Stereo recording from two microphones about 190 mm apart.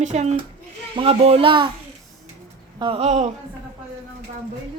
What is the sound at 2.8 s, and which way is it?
Speech, 30° right (ahead or behind).